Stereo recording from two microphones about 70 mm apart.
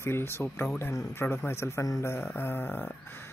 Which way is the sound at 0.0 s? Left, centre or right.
Left.